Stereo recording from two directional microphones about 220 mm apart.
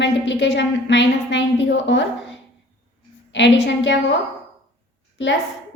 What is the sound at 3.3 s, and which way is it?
Speech, 55° left (ahead or behind).